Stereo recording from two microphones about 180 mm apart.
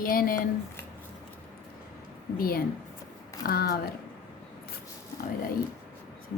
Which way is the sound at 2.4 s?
55° left (ahead or behind).